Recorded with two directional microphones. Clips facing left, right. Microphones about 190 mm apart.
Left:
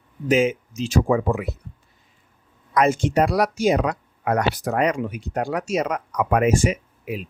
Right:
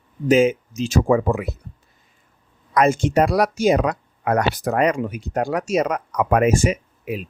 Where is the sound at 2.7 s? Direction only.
45° right (ahead or behind).